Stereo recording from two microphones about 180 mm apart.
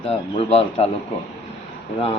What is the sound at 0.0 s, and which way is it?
Speech, 30° left (ahead or behind).